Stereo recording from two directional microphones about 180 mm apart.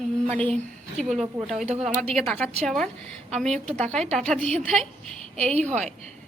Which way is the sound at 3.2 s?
40° right (ahead or behind).